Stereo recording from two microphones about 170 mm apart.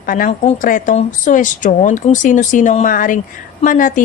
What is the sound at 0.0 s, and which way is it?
A woman's voice, 55° left (ahead or behind).